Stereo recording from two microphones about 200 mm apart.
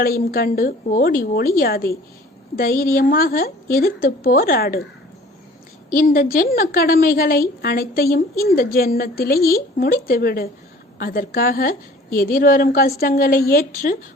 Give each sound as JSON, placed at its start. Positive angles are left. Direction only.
{"t": 0.0, "sound": "a woman's voice", "side_deg": 50}
{"t": 5.9, "sound": "a woman's voice", "side_deg": 45}